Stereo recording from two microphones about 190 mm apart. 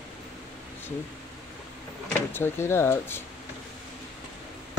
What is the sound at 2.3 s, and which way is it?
Speech, 10° left (ahead or behind).